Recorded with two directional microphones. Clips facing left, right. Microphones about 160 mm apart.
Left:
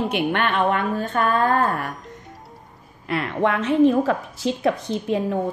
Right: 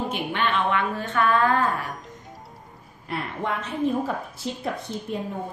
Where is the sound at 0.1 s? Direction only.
55° left (ahead or behind).